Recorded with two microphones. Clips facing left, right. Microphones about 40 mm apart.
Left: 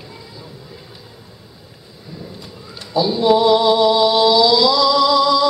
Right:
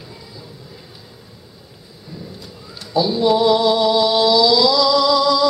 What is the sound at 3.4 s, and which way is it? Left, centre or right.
Music, centre.